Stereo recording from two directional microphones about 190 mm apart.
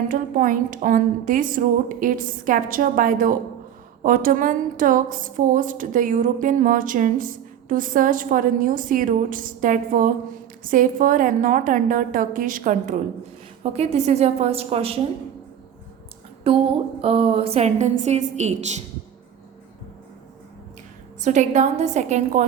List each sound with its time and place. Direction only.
0.1 s a woman's voice: 45° right (ahead or behind)
16.4 s a sound: 30° right (ahead or behind)
17.0 s a woman's voice: 30° right (ahead or behind)
21.2 s a woman's voice: 40° right (ahead or behind)